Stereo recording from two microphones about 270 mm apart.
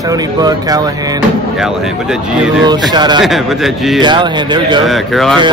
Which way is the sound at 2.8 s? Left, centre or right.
Centre.